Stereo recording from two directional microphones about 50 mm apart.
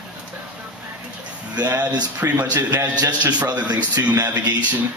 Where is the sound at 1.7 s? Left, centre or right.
Right.